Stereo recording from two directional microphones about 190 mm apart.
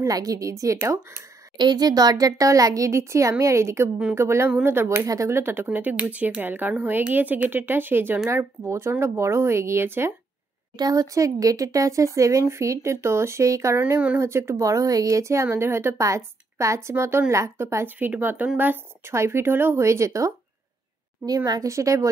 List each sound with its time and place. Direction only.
0.0 s speech: 20° right (ahead or behind)